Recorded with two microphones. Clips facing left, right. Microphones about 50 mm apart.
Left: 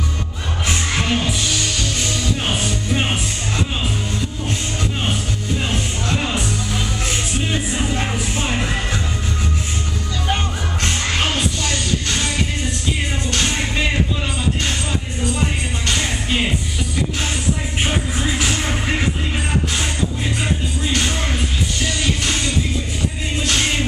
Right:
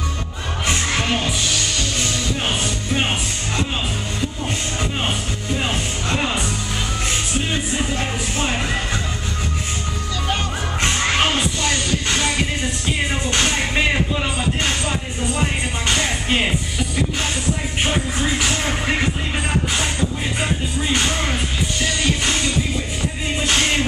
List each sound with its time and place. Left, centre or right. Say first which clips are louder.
0.7 s music: even; centre
5.6 s music: even; centre
7.5 s music: left 1 dB; centre
10.8 s music: right 3 dB; centre
13.3 s music: right 1 dB; centre
17.8 s music: right 1 dB; centre
20.8 s music: right 2 dB; centre
23.4 s music: right 1 dB; centre